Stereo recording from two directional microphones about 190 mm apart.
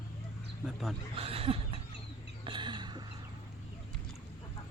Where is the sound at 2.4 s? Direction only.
25° right (ahead or behind).